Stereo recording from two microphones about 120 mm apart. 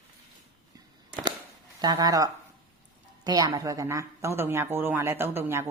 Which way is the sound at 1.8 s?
35° right (ahead or behind).